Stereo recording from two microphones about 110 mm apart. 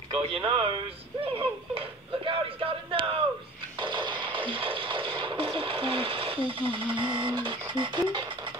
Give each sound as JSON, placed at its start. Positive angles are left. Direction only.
{"t": 0.4, "sound": "speech", "side_deg": -55}
{"t": 3.7, "sound": "a sound", "side_deg": -45}
{"t": 5.2, "sound": "radio", "side_deg": -45}
{"t": 5.6, "sound": "sewing machine", "side_deg": -55}